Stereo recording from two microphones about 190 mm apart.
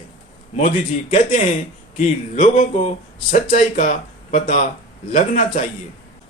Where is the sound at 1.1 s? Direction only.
40° left (ahead or behind).